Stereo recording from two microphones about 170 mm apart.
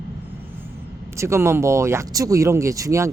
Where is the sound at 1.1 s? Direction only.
15° right (ahead or behind).